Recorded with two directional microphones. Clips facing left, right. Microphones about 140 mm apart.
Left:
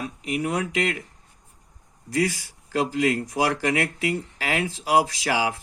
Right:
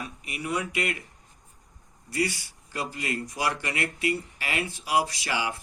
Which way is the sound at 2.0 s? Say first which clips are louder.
Left 4 dB; 90° left.